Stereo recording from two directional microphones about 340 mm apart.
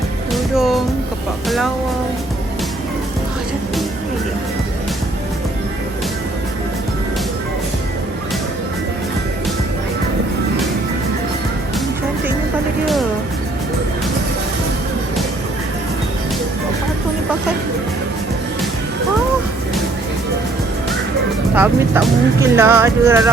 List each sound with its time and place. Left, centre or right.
0.3 s music: centre
1.5 s speech: centre
21.5 s speech: centre